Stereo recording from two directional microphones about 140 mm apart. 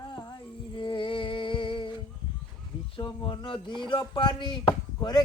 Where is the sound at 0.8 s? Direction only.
35° left (ahead or behind).